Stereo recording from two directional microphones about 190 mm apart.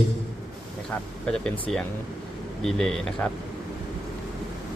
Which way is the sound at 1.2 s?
5° left (ahead or behind).